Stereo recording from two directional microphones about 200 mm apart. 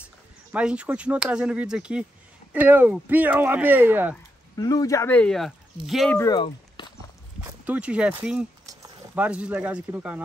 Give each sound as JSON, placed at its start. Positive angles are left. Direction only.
{"t": 0.5, "sound": "speech", "side_deg": -5}
{"t": 4.6, "sound": "speech", "side_deg": 20}
{"t": 6.1, "sound": "speech", "side_deg": 15}
{"t": 7.6, "sound": "speech", "side_deg": -5}